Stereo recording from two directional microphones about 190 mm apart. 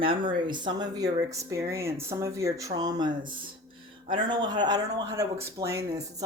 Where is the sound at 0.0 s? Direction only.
25° right (ahead or behind).